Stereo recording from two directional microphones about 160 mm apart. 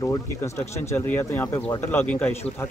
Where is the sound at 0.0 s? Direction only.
20° left (ahead or behind).